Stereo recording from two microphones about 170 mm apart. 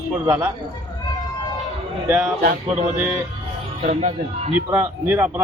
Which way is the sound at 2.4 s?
45° right (ahead or behind).